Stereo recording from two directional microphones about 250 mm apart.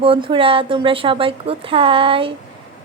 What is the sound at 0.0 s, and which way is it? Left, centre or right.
A woman's voice, right.